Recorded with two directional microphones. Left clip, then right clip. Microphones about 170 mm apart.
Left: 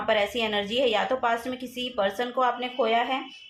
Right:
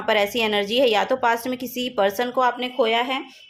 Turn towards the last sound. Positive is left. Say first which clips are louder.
# right 3 dB
turn(degrees=-65)  # may be behind; listen again after turning